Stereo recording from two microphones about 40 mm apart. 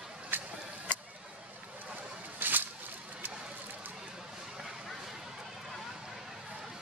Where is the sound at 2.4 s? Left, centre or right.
Right.